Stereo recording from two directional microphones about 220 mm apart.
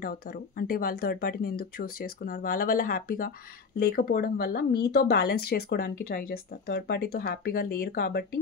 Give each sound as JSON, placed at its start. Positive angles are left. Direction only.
{"t": 0.0, "sound": "speech", "side_deg": 40}